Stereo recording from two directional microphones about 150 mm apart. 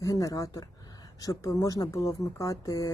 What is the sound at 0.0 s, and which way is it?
Speech, 20° left (ahead or behind).